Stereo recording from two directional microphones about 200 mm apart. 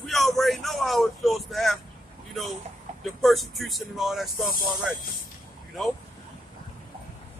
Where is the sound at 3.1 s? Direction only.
Centre (ahead or behind).